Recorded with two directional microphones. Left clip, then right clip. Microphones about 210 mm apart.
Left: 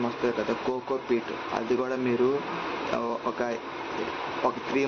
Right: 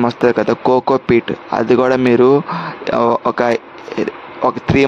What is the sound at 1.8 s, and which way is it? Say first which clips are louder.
Speech: right 17 dB; 55° right (ahead or behind).